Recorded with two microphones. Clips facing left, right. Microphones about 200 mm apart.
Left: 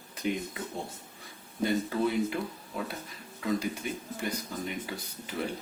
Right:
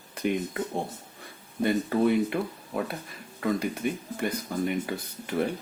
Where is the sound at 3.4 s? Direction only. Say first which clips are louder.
Right 3 dB; 55° right (ahead or behind).